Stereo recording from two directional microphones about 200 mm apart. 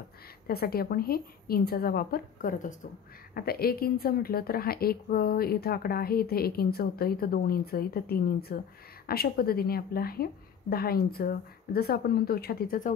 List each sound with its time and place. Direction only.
0.5 s a woman's voice: 50° left (ahead or behind)